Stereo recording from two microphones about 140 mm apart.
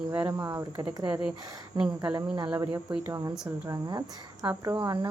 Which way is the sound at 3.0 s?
25° right (ahead or behind).